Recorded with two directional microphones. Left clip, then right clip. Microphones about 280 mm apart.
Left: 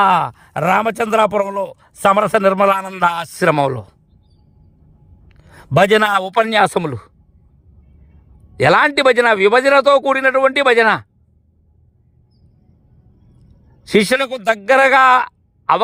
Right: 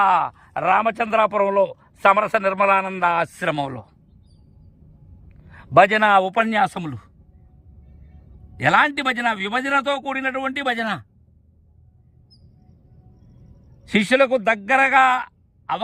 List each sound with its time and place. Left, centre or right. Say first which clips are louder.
0.0 s speech: left 4 dB; left
1.5 s speech: right 3 dB; centre
1.7 s a man's voice: left 3 dB; left
5.7 s a man's voice: left 2 dB; left
6.3 s a man's voice: left 6 dB; centre
8.5 s a man's voice: left 5 dB; centre
13.9 s a man's voice: left 2 dB; left